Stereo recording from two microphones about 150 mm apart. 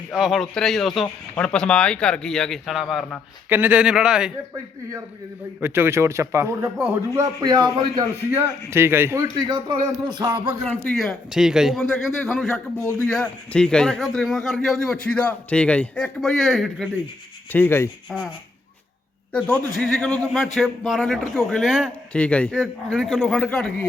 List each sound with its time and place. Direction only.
0.1 s a man's voice: centre (ahead or behind)
3.5 s a man's voice: 10° right (ahead or behind)
5.5 s a man's voice: 15° right (ahead or behind)
7.1 s a man's voice: 25° right (ahead or behind)
8.7 s a man's voice: 15° right (ahead or behind)
9.5 s speech: 30° right (ahead or behind)
10.8 s a man's voice: centre (ahead or behind)
17.5 s speech: 15° left (ahead or behind)
19.3 s a man's voice: 5° left (ahead or behind)
22.1 s a man's voice: 10° left (ahead or behind)